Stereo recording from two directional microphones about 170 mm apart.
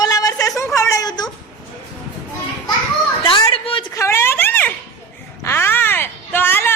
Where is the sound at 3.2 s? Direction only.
30° left (ahead or behind).